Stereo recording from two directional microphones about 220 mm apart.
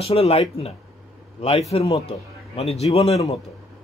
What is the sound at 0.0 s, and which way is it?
A man's voice, 25° left (ahead or behind).